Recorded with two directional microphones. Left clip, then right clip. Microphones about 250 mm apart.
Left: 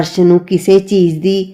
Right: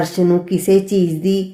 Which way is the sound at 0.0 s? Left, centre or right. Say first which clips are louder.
Left 5 dB; left.